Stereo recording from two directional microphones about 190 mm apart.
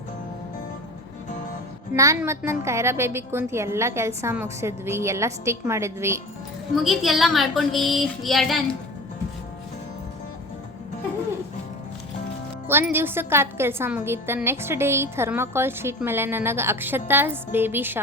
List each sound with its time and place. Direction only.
2.0 s a woman's voice: 15° right (ahead or behind)
6.8 s a woman's voice: centre (ahead or behind)
12.6 s a woman's voice: 10° right (ahead or behind)